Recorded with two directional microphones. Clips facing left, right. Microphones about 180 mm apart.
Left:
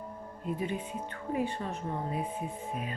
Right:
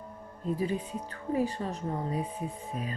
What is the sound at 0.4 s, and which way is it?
Speech, 35° right (ahead or behind).